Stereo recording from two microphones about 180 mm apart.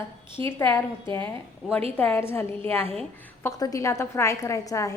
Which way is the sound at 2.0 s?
10° left (ahead or behind).